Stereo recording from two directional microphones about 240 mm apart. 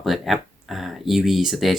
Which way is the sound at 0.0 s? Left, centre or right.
Centre.